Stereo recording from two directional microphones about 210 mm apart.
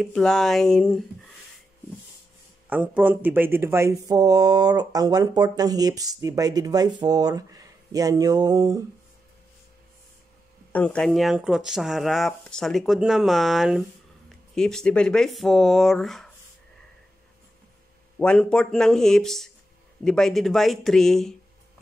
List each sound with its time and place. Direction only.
0.0 s speech: 5° left (ahead or behind)
2.7 s speech: 10° right (ahead or behind)
10.7 s speech: 5° left (ahead or behind)
18.2 s speech: 5° left (ahead or behind)